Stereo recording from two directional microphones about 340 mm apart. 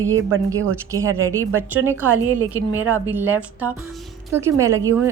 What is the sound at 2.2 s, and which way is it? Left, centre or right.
Speech, right.